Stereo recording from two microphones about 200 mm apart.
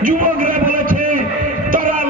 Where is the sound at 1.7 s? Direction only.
45° right (ahead or behind).